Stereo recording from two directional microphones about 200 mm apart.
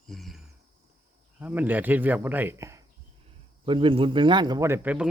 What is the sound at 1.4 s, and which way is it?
Speech, 10° right (ahead or behind).